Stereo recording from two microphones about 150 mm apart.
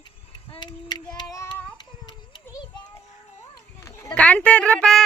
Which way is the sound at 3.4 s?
20° left (ahead or behind).